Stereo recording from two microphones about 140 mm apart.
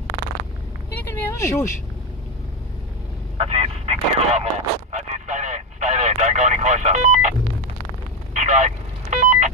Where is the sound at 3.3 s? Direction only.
45° right (ahead or behind).